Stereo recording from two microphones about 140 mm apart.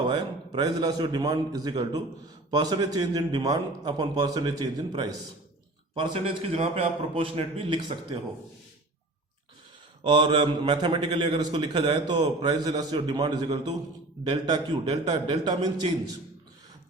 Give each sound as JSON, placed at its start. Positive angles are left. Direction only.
{"t": 0.0, "sound": "a man's voice", "side_deg": -30}
{"t": 7.1, "sound": "a man's voice", "side_deg": -40}
{"t": 10.0, "sound": "a man's voice", "side_deg": -35}